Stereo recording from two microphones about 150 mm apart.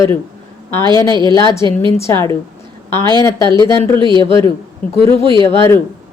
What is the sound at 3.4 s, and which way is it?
A woman's voice, 30° right (ahead or behind).